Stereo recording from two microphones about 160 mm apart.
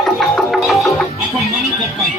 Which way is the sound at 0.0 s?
Centre (ahead or behind).